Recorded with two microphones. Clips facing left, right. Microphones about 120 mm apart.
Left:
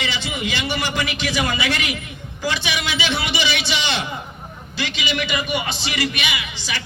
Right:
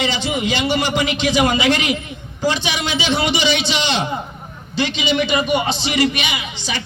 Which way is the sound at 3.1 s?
20° right (ahead or behind).